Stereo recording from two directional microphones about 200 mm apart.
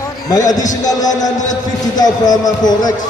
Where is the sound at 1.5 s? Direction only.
20° left (ahead or behind).